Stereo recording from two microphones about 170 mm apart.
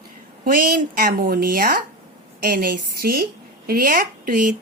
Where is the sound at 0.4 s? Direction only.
55° right (ahead or behind).